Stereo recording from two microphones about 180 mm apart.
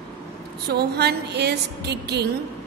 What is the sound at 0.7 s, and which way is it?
Music, 65° right (ahead or behind).